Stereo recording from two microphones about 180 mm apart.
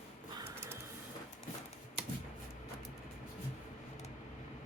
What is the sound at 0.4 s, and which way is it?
Printer, 15° right (ahead or behind).